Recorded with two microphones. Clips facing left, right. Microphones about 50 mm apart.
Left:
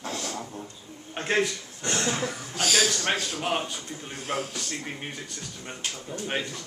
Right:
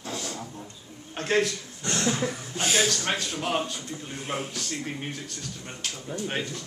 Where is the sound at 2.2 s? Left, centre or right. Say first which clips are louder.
Even; right.